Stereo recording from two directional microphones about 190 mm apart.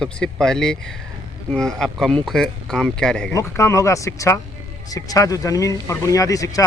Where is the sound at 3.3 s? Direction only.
15° left (ahead or behind).